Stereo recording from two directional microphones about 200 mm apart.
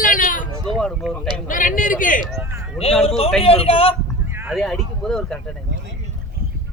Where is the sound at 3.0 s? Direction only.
30° left (ahead or behind).